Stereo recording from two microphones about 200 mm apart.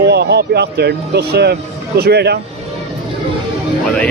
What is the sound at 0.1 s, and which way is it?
Speech, 55° right (ahead or behind).